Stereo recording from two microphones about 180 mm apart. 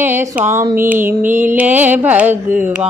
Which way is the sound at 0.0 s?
10° right (ahead or behind).